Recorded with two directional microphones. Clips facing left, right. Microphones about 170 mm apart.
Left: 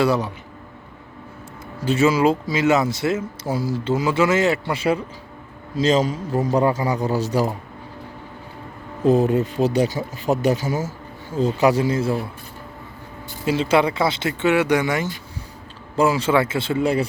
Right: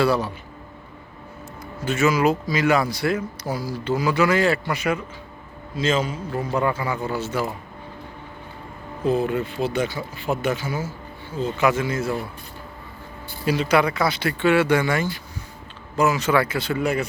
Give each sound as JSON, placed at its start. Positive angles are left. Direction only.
{"t": 0.0, "sound": "speech", "side_deg": 20}
{"t": 1.8, "sound": "speech", "side_deg": 30}
{"t": 9.0, "sound": "speech", "side_deg": 40}
{"t": 13.4, "sound": "speech", "side_deg": 25}
{"t": 16.0, "sound": "speech", "side_deg": 30}